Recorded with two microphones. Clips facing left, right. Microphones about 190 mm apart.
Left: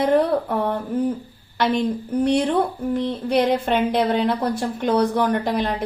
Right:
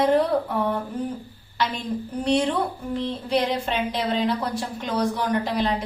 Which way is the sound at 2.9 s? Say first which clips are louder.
Left 3 dB; 55° left (ahead or behind).